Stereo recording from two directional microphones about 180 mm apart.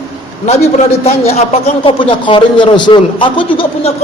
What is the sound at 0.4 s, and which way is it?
A man's voice, 35° left (ahead or behind).